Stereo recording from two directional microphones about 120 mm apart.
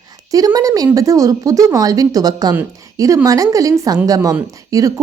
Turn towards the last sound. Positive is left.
turn(degrees=-30)  # may be behind; listen again after turning